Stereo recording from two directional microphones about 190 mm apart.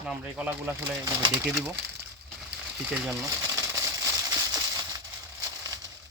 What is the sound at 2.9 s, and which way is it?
Speech, 5° right (ahead or behind).